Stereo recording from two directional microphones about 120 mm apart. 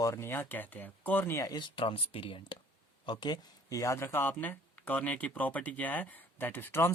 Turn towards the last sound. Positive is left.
turn(degrees=20)  # may be behind; listen again after turning